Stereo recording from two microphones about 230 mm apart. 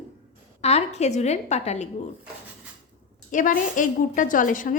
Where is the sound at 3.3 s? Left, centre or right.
Left.